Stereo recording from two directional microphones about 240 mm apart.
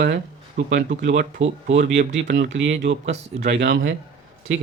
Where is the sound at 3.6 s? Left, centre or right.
Right.